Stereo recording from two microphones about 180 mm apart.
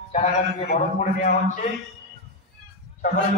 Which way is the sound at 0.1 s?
35° left (ahead or behind).